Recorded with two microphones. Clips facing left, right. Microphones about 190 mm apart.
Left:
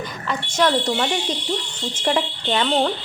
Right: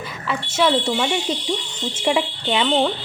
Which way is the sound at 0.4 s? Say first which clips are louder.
Right 1 dB; 5° right (ahead or behind).